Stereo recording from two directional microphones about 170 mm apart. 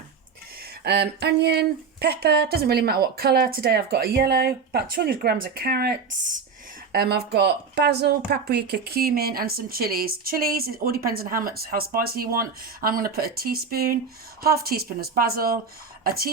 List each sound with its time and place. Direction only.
0.6 s speech: 75° right (ahead or behind)
6.9 s speech: 70° right (ahead or behind)